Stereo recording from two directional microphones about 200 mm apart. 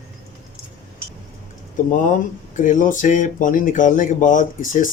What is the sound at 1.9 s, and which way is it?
Speech, 40° left (ahead or behind).